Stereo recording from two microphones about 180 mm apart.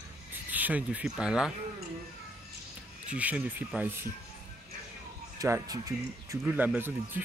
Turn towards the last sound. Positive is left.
turn(degrees=-10)  # may be behind; listen again after turning